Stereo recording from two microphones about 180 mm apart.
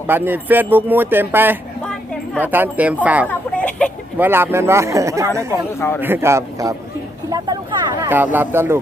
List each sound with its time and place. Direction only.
0.1 s speech: 10° right (ahead or behind)
3.2 s a sound: 5° left (ahead or behind)
4.2 s speech: 10° right (ahead or behind)
8.0 s speech: 10° right (ahead or behind)